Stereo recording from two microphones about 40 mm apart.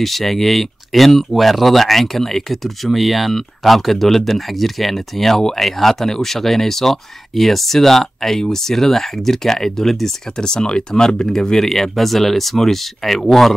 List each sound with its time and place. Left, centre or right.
0.0 s speech: centre
11.7 s speech: centre